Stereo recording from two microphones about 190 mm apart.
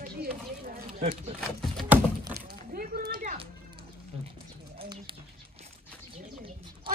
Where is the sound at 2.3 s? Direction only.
50° right (ahead or behind).